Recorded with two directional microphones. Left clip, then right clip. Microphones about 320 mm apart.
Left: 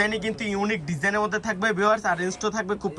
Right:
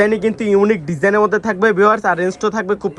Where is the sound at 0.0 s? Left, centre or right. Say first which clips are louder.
Right 10 dB; centre.